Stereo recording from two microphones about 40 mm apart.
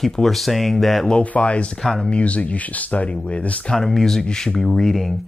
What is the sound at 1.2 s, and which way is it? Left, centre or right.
Speech, left.